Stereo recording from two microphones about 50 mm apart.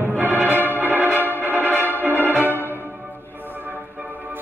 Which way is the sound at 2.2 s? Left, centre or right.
Left.